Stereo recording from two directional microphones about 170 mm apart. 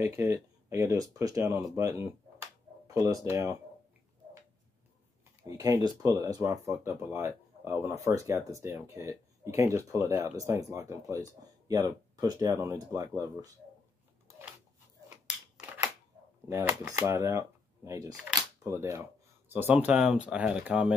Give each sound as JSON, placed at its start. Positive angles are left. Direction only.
{"t": 0.0, "sound": "speech", "side_deg": -15}
{"t": 5.6, "sound": "speech", "side_deg": -20}
{"t": 16.4, "sound": "speech", "side_deg": -15}